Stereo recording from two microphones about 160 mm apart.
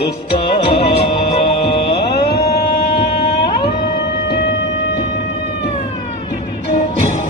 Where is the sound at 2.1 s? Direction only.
90° left.